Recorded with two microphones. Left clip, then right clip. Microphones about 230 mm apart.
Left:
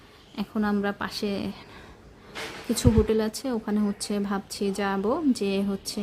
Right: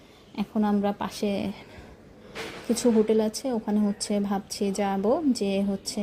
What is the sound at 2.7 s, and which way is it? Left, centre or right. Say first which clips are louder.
A woman's voice: right 1 dB; centre.